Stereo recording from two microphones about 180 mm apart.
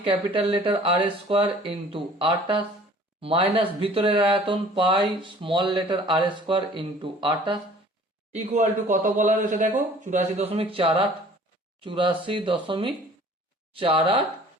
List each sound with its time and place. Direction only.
0.0 s speech: 30° right (ahead or behind)
8.9 s speech: 45° right (ahead or behind); by 14.3 s 30° right (ahead or behind)